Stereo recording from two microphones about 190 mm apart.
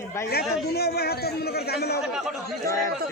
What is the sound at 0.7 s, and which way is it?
A man's voice, 55° left (ahead or behind).